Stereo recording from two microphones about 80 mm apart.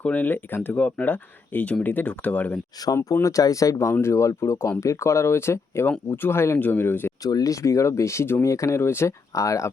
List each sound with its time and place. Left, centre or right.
0.0 s speech: centre
2.9 s speech: left
7.2 s speech: left